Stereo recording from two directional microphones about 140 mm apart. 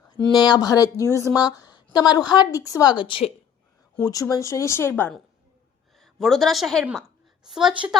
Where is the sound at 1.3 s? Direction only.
25° left (ahead or behind).